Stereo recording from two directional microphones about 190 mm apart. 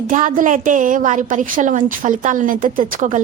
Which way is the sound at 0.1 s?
45° right (ahead or behind).